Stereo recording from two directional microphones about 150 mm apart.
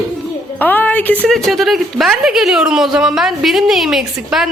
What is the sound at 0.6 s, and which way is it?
A woman's voice, 10° left (ahead or behind).